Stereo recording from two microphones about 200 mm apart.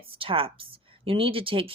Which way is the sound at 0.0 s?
25° right (ahead or behind).